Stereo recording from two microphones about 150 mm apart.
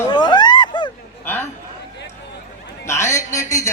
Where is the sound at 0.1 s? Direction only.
30° left (ahead or behind).